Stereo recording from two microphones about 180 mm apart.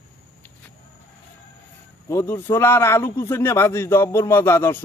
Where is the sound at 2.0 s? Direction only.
15° left (ahead or behind).